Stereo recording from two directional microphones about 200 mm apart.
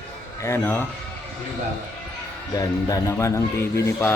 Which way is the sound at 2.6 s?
15° left (ahead or behind).